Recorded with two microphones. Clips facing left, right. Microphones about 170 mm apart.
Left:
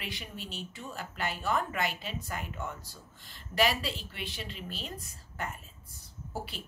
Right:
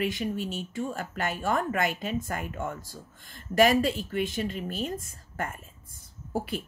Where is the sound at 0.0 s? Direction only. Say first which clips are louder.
Right 13 dB; 45° right (ahead or behind).